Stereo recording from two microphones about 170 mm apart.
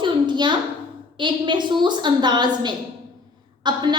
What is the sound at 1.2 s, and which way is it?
A woman's voice, 30° right (ahead or behind).